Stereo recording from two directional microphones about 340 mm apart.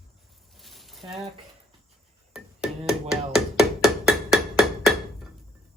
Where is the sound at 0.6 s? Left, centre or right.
Centre.